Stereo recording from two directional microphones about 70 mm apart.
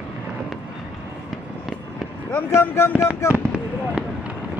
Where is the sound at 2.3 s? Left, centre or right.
Left.